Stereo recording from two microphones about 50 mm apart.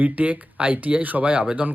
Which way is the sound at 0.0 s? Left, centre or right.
Right.